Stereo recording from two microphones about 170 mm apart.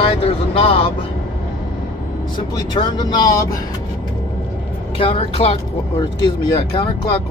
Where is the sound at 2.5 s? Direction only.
25° left (ahead or behind).